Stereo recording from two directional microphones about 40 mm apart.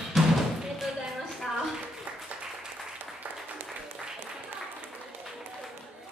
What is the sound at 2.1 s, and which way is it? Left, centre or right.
Applause, right.